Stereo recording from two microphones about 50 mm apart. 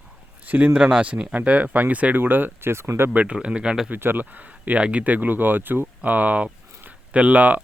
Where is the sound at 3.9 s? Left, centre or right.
Right.